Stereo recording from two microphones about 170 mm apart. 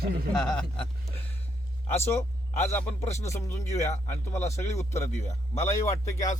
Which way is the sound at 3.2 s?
15° left (ahead or behind).